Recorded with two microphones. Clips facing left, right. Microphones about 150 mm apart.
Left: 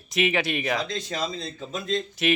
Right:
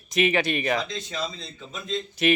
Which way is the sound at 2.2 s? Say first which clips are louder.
Right 3 dB; centre (ahead or behind).